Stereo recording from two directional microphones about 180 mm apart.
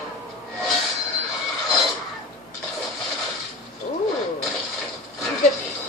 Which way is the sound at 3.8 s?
40° left (ahead or behind).